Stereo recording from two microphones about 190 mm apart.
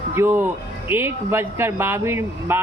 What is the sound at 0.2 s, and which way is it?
Speech, 15° right (ahead or behind).